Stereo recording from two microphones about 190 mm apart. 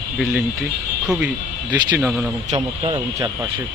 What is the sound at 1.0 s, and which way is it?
Speech, 5° right (ahead or behind).